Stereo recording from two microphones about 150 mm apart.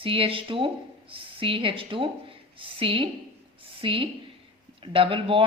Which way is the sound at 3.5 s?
35° right (ahead or behind).